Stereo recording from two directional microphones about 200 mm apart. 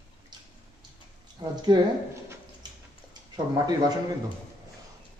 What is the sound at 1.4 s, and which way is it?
Speech, 20° right (ahead or behind).